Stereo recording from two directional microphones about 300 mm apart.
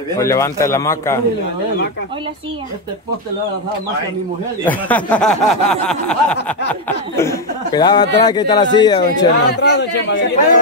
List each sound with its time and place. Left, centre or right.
0.2 s speech: centre
4.6 s speech: centre
9.5 s a man's voice: left